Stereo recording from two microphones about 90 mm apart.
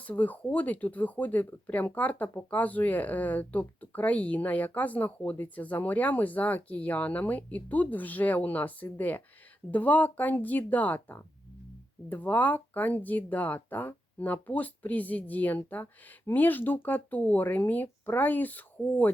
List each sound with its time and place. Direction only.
0.0 s speech: 20° left (ahead or behind)